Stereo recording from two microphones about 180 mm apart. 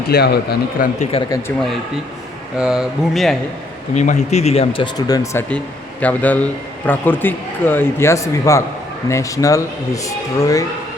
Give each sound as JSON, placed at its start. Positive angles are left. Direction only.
{"t": 0.1, "sound": "speech", "side_deg": 65}
{"t": 0.8, "sound": "speech", "side_deg": 55}
{"t": 1.3, "sound": "speech", "side_deg": 15}
{"t": 2.6, "sound": "speech", "side_deg": -5}
{"t": 3.9, "sound": "speech", "side_deg": 40}